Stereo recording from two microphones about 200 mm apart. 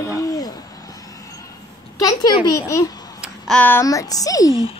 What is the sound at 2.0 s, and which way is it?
Speech, 20° left (ahead or behind).